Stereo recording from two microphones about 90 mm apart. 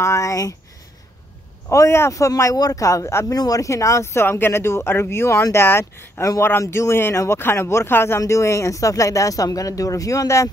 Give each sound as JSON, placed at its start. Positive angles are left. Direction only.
{"t": 0.0, "sound": "speech", "side_deg": 35}
{"t": 1.7, "sound": "speech", "side_deg": 30}